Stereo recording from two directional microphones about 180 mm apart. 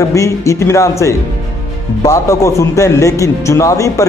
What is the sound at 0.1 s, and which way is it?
A man's voice, 15° left (ahead or behind).